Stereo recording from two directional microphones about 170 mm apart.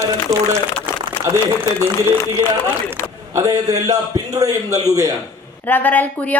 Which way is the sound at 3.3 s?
20° right (ahead or behind).